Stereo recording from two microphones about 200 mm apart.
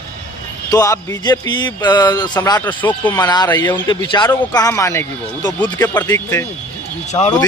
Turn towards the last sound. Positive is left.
turn(degrees=25)  # may be behind; listen again after turning